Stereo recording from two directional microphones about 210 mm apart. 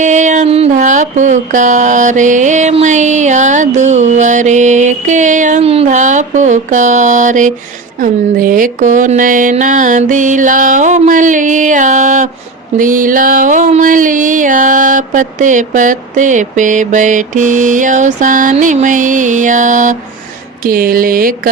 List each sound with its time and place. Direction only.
0.0 s music: 35° right (ahead or behind)
20.7 s speech: 45° right (ahead or behind)